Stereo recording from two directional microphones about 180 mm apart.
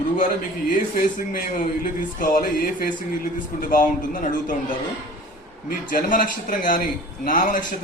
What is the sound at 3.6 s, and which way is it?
A man's voice, 50° left (ahead or behind).